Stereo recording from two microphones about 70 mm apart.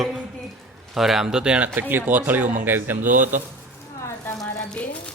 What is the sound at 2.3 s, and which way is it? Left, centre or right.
Speech, right.